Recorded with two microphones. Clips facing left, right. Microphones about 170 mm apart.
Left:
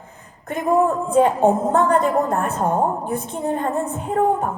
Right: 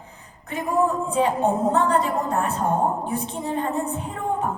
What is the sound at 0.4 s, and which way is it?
Music, 50° left (ahead or behind).